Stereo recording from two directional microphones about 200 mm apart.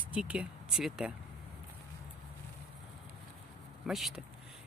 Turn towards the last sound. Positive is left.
turn(degrees=0)  # may be behind; listen again after turning